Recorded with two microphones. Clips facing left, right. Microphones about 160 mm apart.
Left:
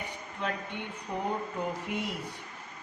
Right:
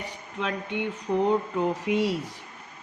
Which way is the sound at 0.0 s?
90° right.